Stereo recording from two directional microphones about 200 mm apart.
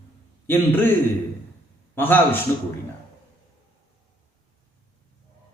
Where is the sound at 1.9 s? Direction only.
10° left (ahead or behind).